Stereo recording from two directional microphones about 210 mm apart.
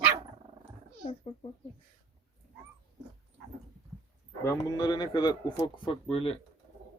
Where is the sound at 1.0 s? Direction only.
30° left (ahead or behind).